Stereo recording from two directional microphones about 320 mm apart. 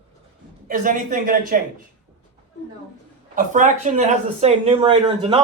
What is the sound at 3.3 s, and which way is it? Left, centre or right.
Speech, right.